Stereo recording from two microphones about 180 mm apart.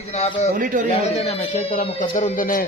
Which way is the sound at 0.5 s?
45° right (ahead or behind).